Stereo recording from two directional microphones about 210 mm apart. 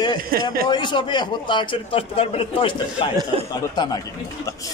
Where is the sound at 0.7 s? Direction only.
20° left (ahead or behind).